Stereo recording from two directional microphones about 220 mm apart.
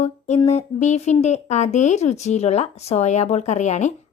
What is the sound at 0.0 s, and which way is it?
Speech, 30° left (ahead or behind).